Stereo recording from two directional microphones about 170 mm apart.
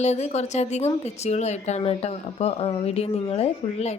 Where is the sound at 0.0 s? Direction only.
40° left (ahead or behind).